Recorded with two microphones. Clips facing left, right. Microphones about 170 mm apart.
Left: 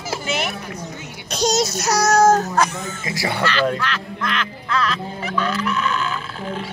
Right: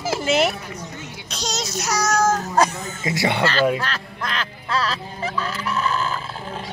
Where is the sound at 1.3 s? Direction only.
45° left (ahead or behind).